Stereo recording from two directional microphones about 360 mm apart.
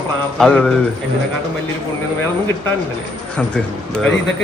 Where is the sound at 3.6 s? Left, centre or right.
Centre.